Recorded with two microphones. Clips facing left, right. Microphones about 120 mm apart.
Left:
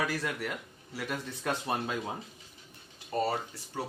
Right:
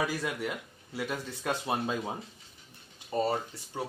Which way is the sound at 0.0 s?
15° right (ahead or behind).